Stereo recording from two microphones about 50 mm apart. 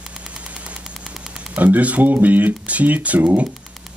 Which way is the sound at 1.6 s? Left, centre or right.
Right.